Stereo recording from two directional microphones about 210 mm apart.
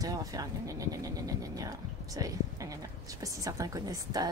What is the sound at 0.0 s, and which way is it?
Speech, 15° right (ahead or behind).